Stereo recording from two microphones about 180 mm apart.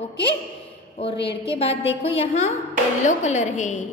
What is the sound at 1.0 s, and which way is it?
A woman's voice, 30° left (ahead or behind).